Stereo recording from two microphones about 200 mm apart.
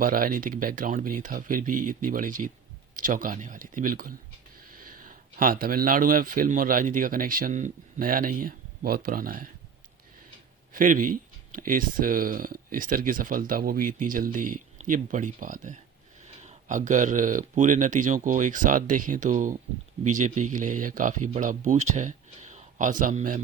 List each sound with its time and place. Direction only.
0.0 s speech: 45° right (ahead or behind)
10.7 s speech: 40° right (ahead or behind)